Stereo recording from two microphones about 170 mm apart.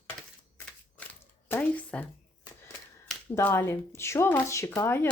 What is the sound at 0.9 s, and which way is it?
Shuffling cards, 10° left (ahead or behind).